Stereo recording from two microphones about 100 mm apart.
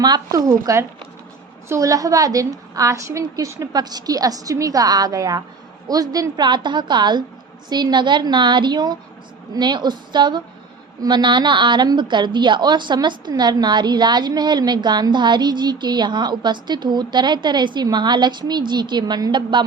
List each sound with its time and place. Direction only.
0.0 s a woman's voice: 40° right (ahead or behind)